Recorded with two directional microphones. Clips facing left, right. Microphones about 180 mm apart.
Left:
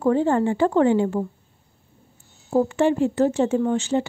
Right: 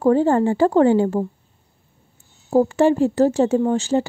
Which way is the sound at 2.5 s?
40° right (ahead or behind).